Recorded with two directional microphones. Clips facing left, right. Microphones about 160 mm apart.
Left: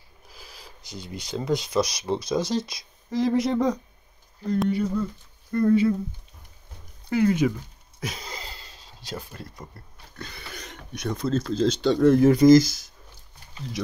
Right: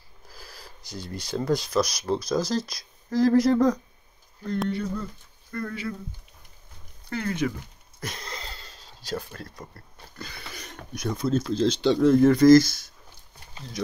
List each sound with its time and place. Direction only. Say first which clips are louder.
0.3 s a sound: right 1 dB; 15° left (ahead or behind)
1.2 s speech: right 1 dB; 5° right (ahead or behind)
2.1 s speech: even; 10° left (ahead or behind)
2.5 s speech: left 1 dB; centre (ahead or behind)
5.5 s speech: left 12 dB; 25° left (ahead or behind)
7.1 s speech: left 7 dB; 15° left (ahead or behind)
8.0 s a sound: left 2 dB; 5° left (ahead or behind)
10.1 s speech: left 1 dB; 5° right (ahead or behind)